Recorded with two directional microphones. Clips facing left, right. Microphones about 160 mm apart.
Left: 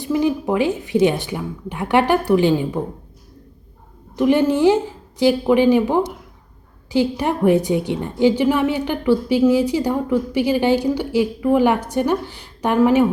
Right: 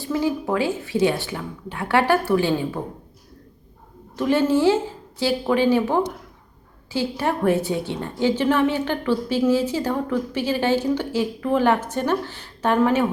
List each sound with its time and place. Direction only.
0.0 s a woman's voice: 20° left (ahead or behind)
4.2 s a woman's voice: 15° left (ahead or behind)